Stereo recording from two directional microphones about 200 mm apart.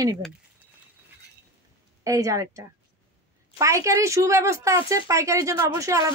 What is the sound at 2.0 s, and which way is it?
A woman's voice, 15° right (ahead or behind).